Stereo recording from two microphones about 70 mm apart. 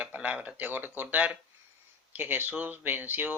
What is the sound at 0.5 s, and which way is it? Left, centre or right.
Speech, right.